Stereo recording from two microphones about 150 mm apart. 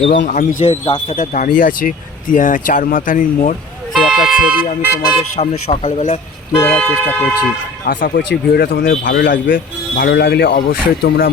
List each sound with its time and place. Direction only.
0.1 s speech: 60° left (ahead or behind)
3.9 s vehicle: centre (ahead or behind)
5.4 s speech: 45° left (ahead or behind)
6.6 s speech: 10° left (ahead or behind)
7.9 s speech: 75° left (ahead or behind)